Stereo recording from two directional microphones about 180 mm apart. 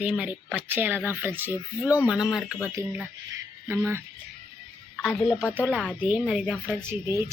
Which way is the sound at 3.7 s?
15° right (ahead or behind).